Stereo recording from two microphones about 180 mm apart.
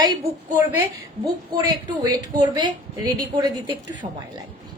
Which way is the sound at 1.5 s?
25° right (ahead or behind).